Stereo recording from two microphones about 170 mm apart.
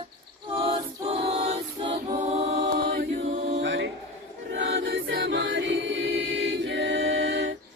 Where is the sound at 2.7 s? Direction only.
60° right (ahead or behind).